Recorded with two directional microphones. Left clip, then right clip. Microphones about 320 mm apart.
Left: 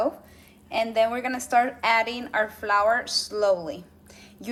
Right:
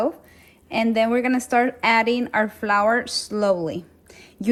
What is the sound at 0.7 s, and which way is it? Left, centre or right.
Speech, right.